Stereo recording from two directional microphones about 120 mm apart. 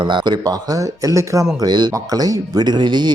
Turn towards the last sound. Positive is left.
turn(degrees=-40)  # may be behind; listen again after turning